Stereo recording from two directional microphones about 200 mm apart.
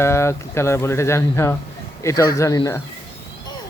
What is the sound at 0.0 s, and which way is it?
Speech, 15° left (ahead or behind).